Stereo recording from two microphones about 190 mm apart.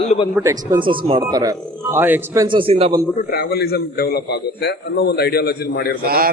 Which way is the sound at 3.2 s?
55° left (ahead or behind).